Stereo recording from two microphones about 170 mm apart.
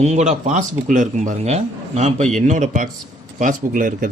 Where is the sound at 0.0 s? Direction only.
40° right (ahead or behind).